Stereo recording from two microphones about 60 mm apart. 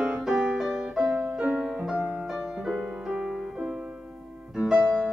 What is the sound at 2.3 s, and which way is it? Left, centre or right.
Music, centre.